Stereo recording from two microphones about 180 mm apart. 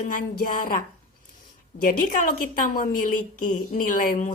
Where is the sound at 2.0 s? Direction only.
50° left (ahead or behind).